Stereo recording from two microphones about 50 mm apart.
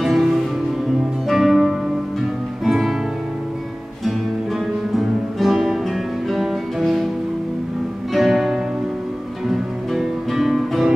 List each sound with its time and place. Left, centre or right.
0.0 s music: centre
4.9 s music: centre
8.1 s music: centre